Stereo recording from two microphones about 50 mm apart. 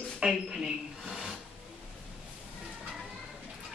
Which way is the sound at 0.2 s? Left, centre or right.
Centre.